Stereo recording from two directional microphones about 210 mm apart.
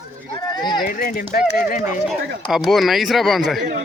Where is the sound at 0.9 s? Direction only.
45° left (ahead or behind).